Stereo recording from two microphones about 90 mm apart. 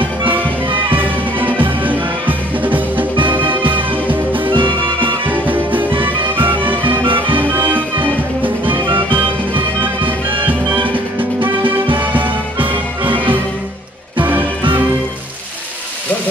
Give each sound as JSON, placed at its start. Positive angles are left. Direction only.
{"t": 0.7, "sound": "music", "side_deg": -65}
{"t": 1.4, "sound": "music", "side_deg": -20}
{"t": 3.2, "sound": "music", "side_deg": -65}
{"t": 5.3, "sound": "music", "side_deg": -20}
{"t": 5.9, "sound": "music", "side_deg": -70}
{"t": 9.1, "sound": "music", "side_deg": -65}
{"t": 12.0, "sound": "music", "side_deg": -20}